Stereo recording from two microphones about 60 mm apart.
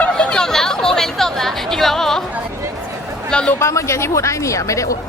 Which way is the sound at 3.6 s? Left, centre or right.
Left.